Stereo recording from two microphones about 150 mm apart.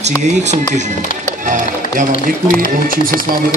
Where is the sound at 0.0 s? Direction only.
50° right (ahead or behind).